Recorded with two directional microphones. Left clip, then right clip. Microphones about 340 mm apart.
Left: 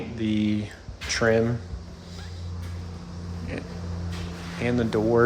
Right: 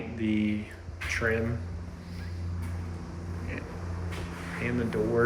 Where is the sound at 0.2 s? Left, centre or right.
Centre.